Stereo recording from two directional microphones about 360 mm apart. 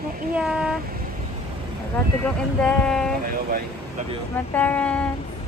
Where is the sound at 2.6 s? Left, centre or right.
Centre.